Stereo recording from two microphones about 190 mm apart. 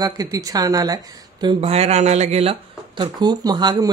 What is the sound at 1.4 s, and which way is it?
Speech, 30° right (ahead or behind).